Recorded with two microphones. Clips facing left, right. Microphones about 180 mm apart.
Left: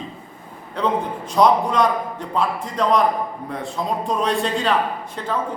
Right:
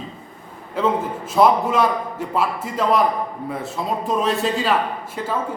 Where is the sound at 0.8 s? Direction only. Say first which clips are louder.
Right 2 dB; 5° right (ahead or behind).